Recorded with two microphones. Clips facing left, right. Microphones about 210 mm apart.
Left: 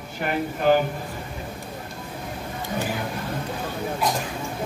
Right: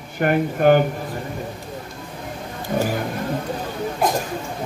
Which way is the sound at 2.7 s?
55° right (ahead or behind).